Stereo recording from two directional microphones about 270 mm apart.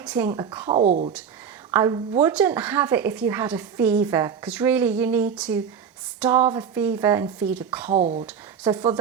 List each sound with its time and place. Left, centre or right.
0.0 s a woman's voice: centre
0.7 s speech: right
1.7 s a woman's voice: centre
7.9 s a woman's voice: right